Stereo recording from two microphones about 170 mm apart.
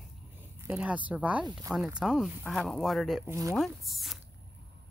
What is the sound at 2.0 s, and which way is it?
Speech, centre (ahead or behind).